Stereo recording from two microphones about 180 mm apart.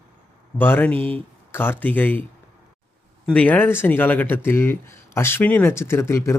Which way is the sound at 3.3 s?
10° left (ahead or behind).